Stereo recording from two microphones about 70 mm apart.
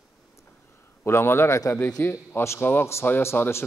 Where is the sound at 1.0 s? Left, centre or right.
Left.